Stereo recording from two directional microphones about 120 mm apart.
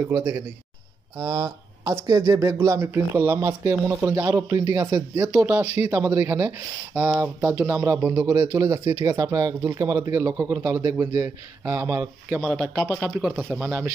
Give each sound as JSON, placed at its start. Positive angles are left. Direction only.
{"t": 1.1, "sound": "speech", "side_deg": -30}
{"t": 5.3, "sound": "speech", "side_deg": -10}
{"t": 8.3, "sound": "speech", "side_deg": -25}
{"t": 12.4, "sound": "speech", "side_deg": -5}